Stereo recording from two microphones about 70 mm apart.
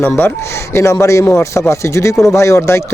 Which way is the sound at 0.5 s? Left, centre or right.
Left.